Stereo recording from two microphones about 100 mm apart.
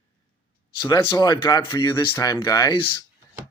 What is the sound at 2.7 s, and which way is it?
Speech, 55° left (ahead or behind).